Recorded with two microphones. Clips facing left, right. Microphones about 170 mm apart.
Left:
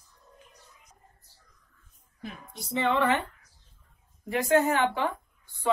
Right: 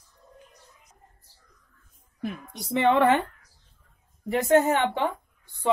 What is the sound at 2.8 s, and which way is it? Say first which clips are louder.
Speech: right 5 dB; 55° right (ahead or behind).